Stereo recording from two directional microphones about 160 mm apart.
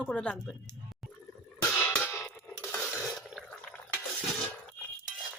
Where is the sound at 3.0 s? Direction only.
Centre (ahead or behind).